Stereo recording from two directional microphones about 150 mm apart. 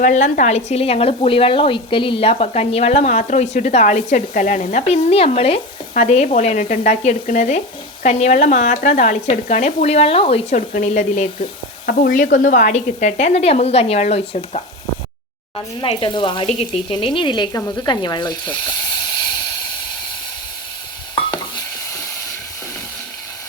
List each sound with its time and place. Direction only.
0.0 s speech: 60° left (ahead or behind); by 10.6 s 40° left (ahead or behind)
10.7 s speech: 55° left (ahead or behind)
11.9 s speech: 75° left (ahead or behind); by 18.5 s 30° left (ahead or behind)